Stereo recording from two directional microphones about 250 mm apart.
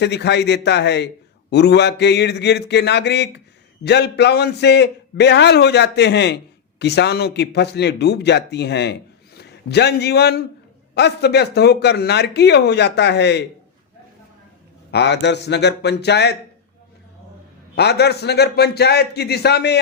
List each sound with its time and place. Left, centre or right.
0.0 s a man's voice: left
14.8 s a man's voice: left
17.7 s a man's voice: left